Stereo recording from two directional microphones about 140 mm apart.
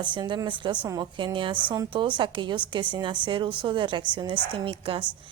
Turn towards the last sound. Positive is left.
turn(degrees=-35)  # may be behind; listen again after turning